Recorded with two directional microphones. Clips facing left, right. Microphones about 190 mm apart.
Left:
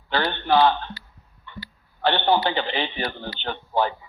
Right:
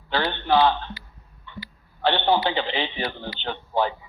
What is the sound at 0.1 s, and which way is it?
Speech, 50° left (ahead or behind).